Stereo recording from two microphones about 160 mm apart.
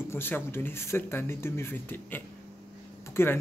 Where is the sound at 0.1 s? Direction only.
15° left (ahead or behind).